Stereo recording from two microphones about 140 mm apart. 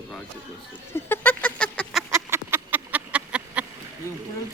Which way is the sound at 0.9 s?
15° left (ahead or behind).